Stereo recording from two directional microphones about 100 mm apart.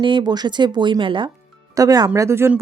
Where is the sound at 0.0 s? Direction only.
50° right (ahead or behind).